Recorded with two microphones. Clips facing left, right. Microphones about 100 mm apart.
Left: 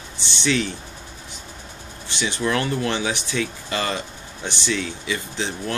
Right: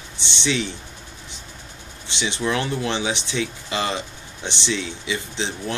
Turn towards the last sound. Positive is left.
turn(degrees=-25)  # may be behind; listen again after turning